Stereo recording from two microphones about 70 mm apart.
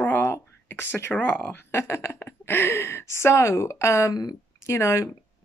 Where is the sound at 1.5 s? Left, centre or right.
Left.